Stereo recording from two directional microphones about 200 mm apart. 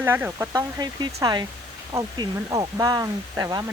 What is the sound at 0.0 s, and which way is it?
Speech, 10° right (ahead or behind).